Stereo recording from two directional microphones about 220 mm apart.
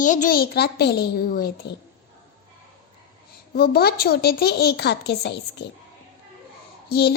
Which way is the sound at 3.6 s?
45° left (ahead or behind).